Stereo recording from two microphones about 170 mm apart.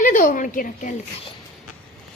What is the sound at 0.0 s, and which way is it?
Speech, 50° left (ahead or behind).